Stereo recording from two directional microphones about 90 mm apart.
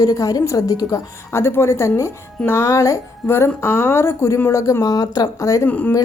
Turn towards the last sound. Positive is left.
turn(degrees=15)  # may be behind; listen again after turning